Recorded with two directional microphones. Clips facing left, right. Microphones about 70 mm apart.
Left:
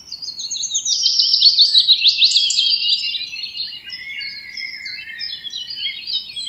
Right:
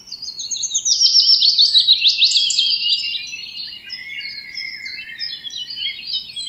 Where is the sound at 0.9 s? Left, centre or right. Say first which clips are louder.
Right 2 dB; centre.